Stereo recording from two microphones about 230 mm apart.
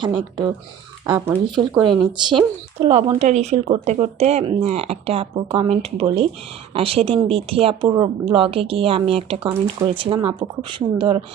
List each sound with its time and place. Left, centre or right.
0.0 s speech: right